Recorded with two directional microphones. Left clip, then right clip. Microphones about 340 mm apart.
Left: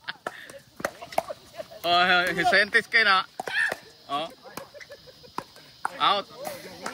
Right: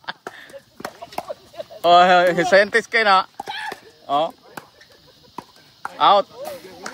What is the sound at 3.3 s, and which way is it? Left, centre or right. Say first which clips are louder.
Clip-clop: left 3 dB; left.